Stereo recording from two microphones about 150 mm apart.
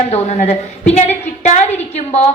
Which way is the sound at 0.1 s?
45° left (ahead or behind).